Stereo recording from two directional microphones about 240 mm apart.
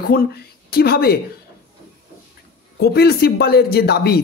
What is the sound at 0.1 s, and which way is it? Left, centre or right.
Speech, left.